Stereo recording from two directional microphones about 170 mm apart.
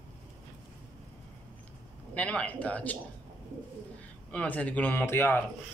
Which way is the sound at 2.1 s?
10° left (ahead or behind).